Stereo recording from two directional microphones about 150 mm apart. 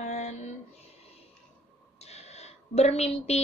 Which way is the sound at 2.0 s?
45° left (ahead or behind).